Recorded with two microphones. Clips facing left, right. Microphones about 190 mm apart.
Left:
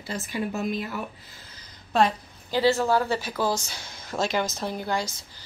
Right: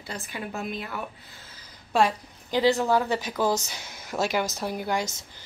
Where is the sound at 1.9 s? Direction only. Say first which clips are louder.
Left 1 dB; 15° right (ahead or behind).